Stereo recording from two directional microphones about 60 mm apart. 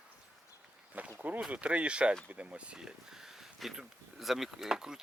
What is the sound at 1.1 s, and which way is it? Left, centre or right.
Speech, right.